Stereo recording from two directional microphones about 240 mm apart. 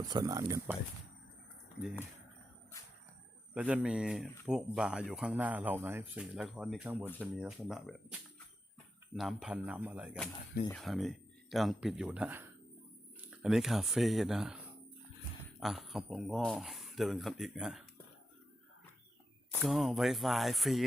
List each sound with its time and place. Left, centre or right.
0.0 s speech: centre
3.5 s speech: centre
9.1 s speech: centre
15.6 s speech: centre
19.5 s speech: centre